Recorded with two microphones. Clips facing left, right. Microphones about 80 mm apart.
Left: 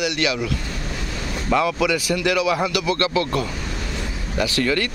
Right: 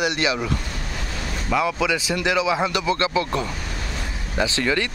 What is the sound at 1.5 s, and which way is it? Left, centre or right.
Speech, centre.